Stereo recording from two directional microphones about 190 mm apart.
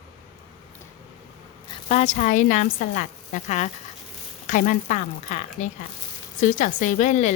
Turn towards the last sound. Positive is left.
turn(degrees=40)  # may be behind; listen again after turning